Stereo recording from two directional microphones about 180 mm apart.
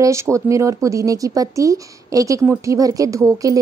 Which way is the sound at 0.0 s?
15° right (ahead or behind).